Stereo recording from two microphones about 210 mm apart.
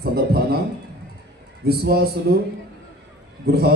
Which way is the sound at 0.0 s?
50° right (ahead or behind).